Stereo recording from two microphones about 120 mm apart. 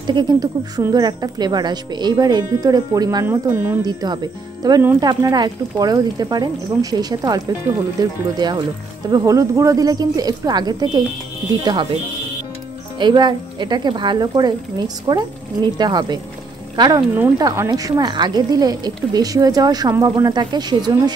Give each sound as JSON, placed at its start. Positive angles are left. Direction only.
{"t": 0.0, "sound": "speech", "side_deg": -35}
{"t": 3.3, "sound": "speech", "side_deg": -15}
{"t": 3.8, "sound": "speech", "side_deg": -35}
{"t": 13.0, "sound": "speech", "side_deg": -40}